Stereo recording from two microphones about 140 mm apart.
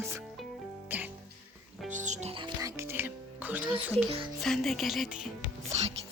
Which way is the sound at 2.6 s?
20° right (ahead or behind).